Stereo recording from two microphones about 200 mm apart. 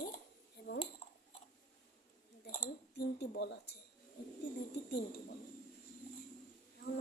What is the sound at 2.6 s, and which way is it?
Speech, 55° left (ahead or behind).